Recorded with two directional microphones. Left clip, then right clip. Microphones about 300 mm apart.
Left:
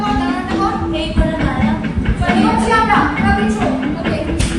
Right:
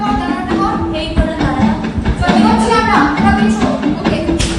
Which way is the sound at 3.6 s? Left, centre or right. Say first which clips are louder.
Right 3 dB; right.